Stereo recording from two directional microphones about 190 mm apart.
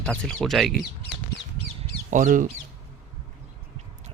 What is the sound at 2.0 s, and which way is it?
Speech, 40° right (ahead or behind).